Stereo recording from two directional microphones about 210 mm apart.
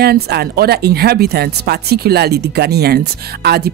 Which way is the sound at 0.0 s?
50° right (ahead or behind).